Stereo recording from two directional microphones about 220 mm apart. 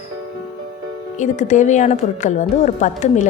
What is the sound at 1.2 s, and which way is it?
A woman's voice, 35° left (ahead or behind).